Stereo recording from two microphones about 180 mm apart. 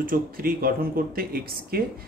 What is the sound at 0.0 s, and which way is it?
A man's voice, 55° right (ahead or behind).